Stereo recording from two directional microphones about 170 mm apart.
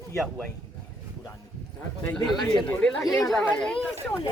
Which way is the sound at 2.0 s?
5° left (ahead or behind).